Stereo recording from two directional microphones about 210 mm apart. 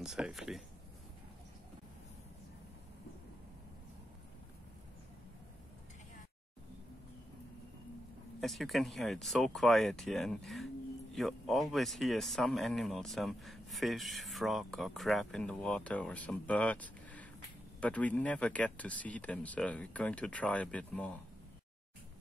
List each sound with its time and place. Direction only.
0.0 s speech: 5° right (ahead or behind)
8.4 s speech: centre (ahead or behind)